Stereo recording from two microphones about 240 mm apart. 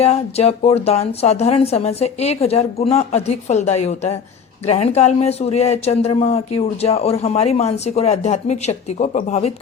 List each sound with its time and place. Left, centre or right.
0.0 s a woman's voice: left